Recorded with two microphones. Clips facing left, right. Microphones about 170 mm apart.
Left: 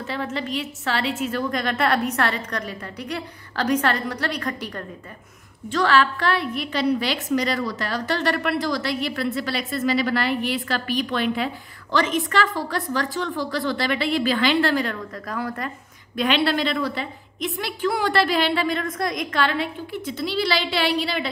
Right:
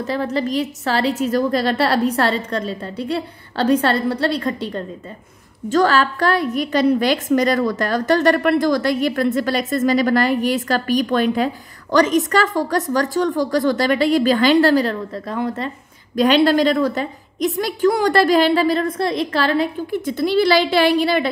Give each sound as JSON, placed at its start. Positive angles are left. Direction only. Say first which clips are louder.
{"t": 0.0, "sound": "a woman's voice", "louder": "right 7 dB", "side_deg": -40}
{"t": 5.7, "sound": "a woman's voice", "louder": "right 4 dB", "side_deg": -40}
{"t": 16.2, "sound": "a woman's voice", "louder": "right 7 dB", "side_deg": -40}